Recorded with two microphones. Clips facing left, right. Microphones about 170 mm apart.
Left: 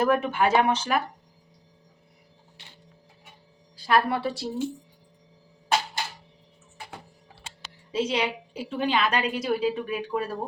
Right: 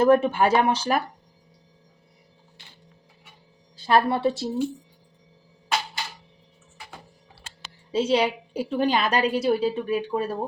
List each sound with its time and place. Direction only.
0.0 s a woman's voice: 30° right (ahead or behind)
3.8 s a woman's voice: 25° right (ahead or behind)
7.9 s a woman's voice: 30° right (ahead or behind)